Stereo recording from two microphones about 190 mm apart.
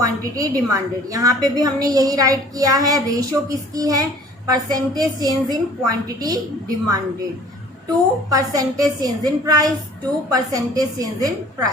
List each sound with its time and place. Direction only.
0.0 s a woman's voice: 20° right (ahead or behind)
8.3 s a woman's voice: 20° right (ahead or behind)